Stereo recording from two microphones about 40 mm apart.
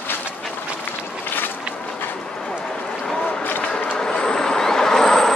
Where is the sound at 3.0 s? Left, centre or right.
Centre.